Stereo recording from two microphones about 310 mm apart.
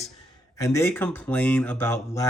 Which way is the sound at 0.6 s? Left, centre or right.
Centre.